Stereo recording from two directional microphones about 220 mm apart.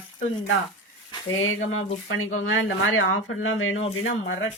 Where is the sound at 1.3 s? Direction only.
65° left (ahead or behind).